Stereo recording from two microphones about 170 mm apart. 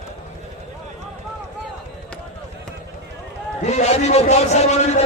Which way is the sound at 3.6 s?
40° left (ahead or behind).